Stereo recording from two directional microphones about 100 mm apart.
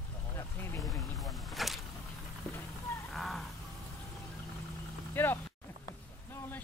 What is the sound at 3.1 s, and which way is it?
Wild animals, centre (ahead or behind).